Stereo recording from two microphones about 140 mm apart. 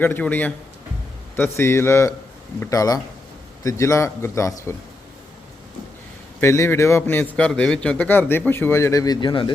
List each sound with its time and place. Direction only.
0.0 s a man's voice: 15° left (ahead or behind)
6.4 s a man's voice: 20° left (ahead or behind); by 9.5 s 35° left (ahead or behind)